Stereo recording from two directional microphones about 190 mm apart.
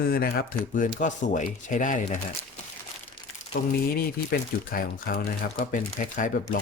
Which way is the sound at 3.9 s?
50° left (ahead or behind).